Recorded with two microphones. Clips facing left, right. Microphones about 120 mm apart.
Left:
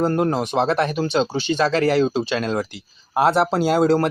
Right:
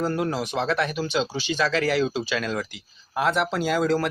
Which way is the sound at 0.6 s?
35° left (ahead or behind).